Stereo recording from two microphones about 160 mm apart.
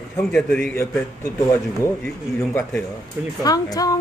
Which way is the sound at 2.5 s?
15° left (ahead or behind).